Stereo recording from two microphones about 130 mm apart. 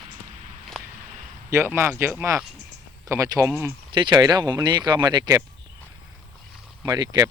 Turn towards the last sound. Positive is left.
turn(degrees=-30)  # may be behind; listen again after turning